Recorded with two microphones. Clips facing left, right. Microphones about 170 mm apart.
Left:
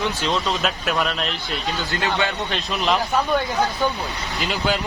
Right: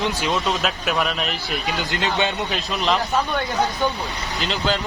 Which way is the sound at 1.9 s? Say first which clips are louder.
Even; 20° right (ahead or behind).